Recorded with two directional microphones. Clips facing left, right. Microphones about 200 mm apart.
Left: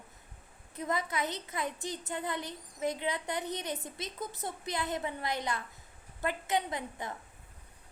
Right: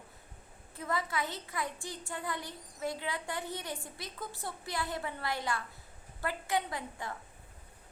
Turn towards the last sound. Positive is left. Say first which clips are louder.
# left 2 dB
turn(degrees=20)  # may be behind; listen again after turning